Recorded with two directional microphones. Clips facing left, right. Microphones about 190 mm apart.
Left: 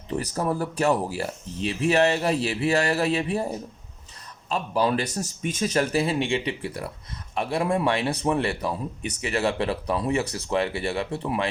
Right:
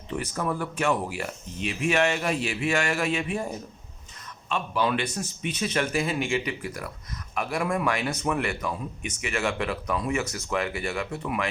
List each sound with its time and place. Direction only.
0.1 s a man's voice: 40° left (ahead or behind)